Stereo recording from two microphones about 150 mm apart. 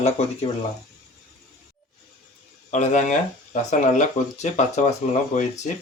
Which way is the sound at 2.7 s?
55° left (ahead or behind).